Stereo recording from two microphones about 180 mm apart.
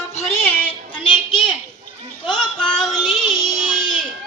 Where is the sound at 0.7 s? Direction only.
25° left (ahead or behind).